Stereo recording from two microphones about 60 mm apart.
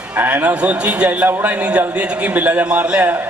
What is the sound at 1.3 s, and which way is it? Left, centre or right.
A man's voice, right.